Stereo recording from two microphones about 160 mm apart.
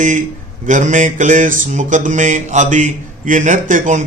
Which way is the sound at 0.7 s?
50° right (ahead or behind).